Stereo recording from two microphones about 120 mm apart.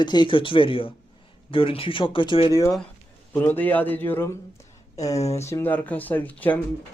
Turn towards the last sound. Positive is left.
turn(degrees=15)  # may be behind; listen again after turning